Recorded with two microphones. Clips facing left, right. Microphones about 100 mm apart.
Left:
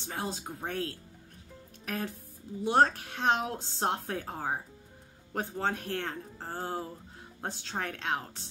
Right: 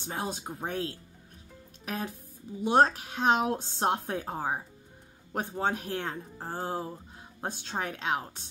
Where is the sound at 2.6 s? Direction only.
15° right (ahead or behind).